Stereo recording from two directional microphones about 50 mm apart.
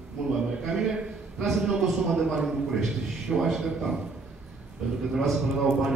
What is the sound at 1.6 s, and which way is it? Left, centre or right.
A man's voice, centre.